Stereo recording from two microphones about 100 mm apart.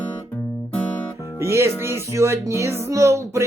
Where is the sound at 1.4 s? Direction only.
25° right (ahead or behind).